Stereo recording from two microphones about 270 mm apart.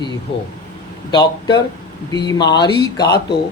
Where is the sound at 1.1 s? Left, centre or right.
Centre.